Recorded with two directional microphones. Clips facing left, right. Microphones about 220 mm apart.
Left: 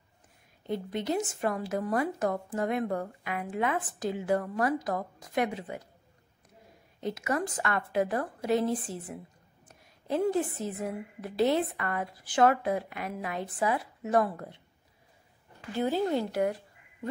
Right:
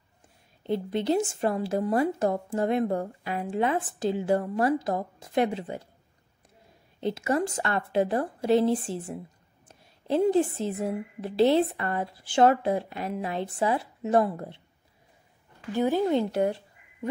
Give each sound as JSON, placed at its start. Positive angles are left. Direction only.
{"t": 0.7, "sound": "speech", "side_deg": -30}
{"t": 7.0, "sound": "speech", "side_deg": -30}
{"t": 15.7, "sound": "a woman's voice", "side_deg": -15}